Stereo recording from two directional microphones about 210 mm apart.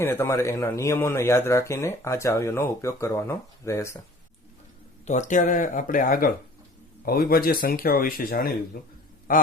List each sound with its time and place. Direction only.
0.0 s speech: 10° left (ahead or behind)
5.0 s speech: 35° left (ahead or behind)